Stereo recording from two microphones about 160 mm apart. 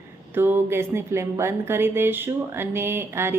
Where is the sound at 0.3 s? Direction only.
15° right (ahead or behind).